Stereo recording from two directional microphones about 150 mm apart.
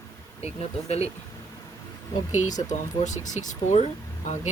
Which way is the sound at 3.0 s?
55° left (ahead or behind).